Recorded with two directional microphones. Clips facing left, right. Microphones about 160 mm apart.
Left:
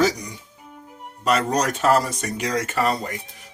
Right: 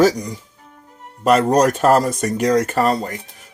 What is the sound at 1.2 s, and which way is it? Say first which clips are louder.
Speech: right 7 dB; 50° right (ahead or behind).